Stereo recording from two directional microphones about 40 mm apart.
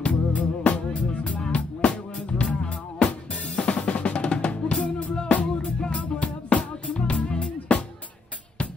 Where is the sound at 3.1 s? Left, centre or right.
Left.